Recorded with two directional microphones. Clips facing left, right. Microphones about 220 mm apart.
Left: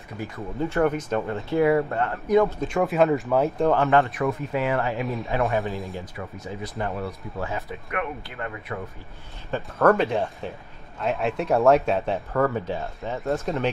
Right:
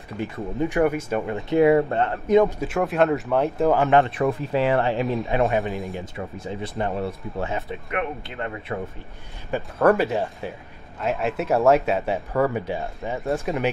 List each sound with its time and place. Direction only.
0.2 s speech: 20° right (ahead or behind)
2.6 s speech: centre (ahead or behind)
4.1 s speech: 30° right (ahead or behind)
5.0 s speech: centre (ahead or behind)
5.9 s speech: 25° right (ahead or behind)
9.5 s speech: 10° right (ahead or behind)